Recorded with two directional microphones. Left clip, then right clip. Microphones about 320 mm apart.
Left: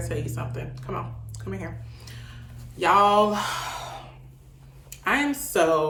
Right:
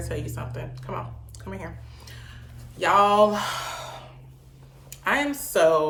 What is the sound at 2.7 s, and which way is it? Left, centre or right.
A woman's voice, centre.